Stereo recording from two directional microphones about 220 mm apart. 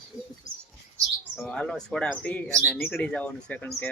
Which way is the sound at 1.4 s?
5° left (ahead or behind).